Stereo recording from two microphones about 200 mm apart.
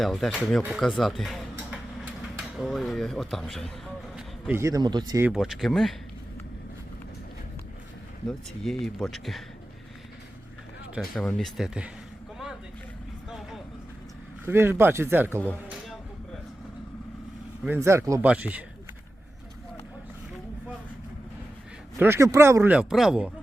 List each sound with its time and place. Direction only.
0.0 s speech: centre (ahead or behind)
4.4 s a man's voice: 15° right (ahead or behind)
5.3 s speech: centre (ahead or behind)
8.3 s speech: centre (ahead or behind)
10.9 s speech: 5° left (ahead or behind)
14.4 s a man's voice: 10° right (ahead or behind)
17.7 s a man's voice: 15° right (ahead or behind)
21.9 s a man's voice: 10° right (ahead or behind)